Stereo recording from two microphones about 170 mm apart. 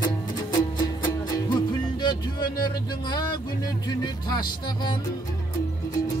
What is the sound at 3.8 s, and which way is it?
Music, 25° left (ahead or behind).